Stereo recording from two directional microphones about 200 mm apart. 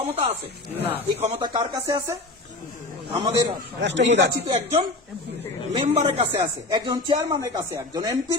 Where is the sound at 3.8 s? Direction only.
60° right (ahead or behind).